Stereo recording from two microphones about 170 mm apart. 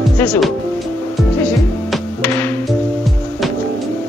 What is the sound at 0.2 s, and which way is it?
Speech, 5° left (ahead or behind).